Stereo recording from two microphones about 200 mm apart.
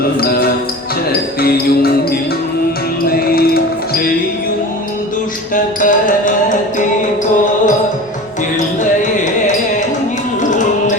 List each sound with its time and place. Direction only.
0.2 s music: 50° left (ahead or behind)
3.1 s music: 50° left (ahead or behind)
5.5 s music: 40° left (ahead or behind)
8.8 s music: 40° left (ahead or behind)